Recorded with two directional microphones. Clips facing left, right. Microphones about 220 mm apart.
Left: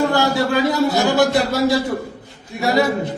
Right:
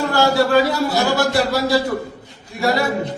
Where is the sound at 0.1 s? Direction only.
20° left (ahead or behind).